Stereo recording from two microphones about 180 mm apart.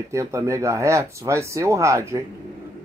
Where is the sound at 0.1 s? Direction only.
15° right (ahead or behind).